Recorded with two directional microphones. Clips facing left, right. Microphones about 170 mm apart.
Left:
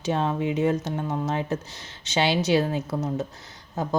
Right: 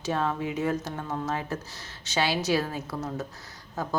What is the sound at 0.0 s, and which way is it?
Speech, 20° left (ahead or behind).